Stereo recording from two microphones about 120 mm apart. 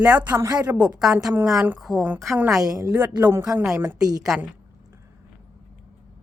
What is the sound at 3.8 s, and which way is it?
Speech, 30° right (ahead or behind).